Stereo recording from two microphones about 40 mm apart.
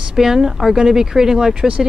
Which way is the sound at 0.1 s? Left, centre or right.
Centre.